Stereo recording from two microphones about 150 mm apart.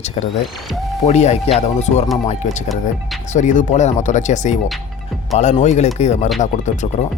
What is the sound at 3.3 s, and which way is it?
Speech, 55° left (ahead or behind).